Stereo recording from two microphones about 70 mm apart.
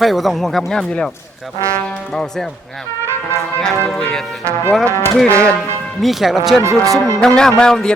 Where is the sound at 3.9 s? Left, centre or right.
Centre.